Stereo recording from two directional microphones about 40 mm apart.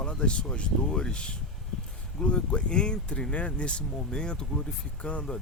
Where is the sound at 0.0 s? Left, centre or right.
Left.